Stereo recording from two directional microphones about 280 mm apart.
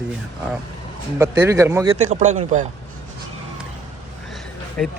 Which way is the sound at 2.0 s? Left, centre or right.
Right.